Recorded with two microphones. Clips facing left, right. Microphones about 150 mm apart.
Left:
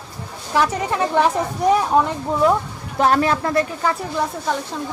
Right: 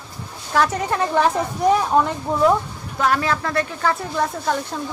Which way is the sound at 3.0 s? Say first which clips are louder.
Left 3 dB; 30° left (ahead or behind).